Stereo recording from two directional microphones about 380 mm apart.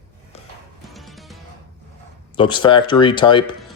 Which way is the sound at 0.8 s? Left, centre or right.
Centre.